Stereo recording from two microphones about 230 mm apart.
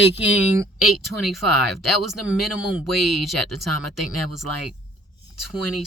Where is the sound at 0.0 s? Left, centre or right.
Left.